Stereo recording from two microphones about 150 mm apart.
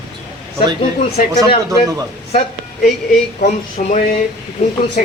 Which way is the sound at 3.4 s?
55° left (ahead or behind).